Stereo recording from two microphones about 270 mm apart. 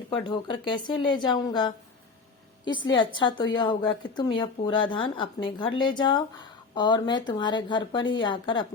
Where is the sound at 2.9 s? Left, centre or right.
Centre.